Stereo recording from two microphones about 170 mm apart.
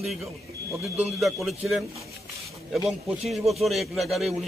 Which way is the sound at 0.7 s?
15° right (ahead or behind).